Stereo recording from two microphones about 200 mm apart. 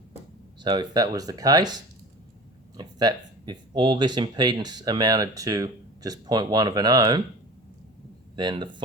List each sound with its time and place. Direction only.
0.6 s speech: 20° right (ahead or behind)
8.4 s speech: 20° right (ahead or behind)